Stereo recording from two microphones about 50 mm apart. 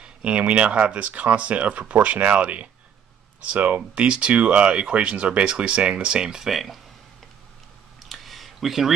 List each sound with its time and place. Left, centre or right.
0.0 s speech: right
6.5 s speech: centre
8.0 s a sound: centre